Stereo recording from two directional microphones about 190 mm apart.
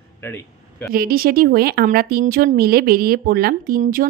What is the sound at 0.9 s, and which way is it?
Speech, 50° right (ahead or behind).